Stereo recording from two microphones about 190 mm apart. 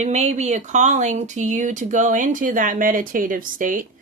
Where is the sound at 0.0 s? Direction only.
35° right (ahead or behind).